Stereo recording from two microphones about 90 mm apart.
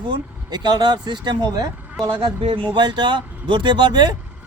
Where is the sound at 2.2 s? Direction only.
80° right.